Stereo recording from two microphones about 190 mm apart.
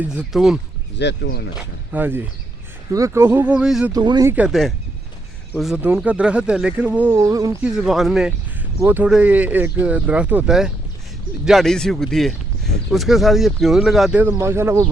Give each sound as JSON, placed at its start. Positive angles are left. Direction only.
{"t": 0.0, "sound": "speech", "side_deg": -5}
{"t": 0.9, "sound": "speech", "side_deg": 65}
{"t": 1.9, "sound": "speech", "side_deg": -10}
{"t": 3.9, "sound": "speech", "side_deg": -20}
{"t": 4.3, "sound": "speech", "side_deg": -5}
{"t": 7.6, "sound": "speech", "side_deg": 0}